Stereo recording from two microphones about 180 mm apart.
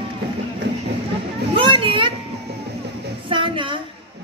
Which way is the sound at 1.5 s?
30° right (ahead or behind).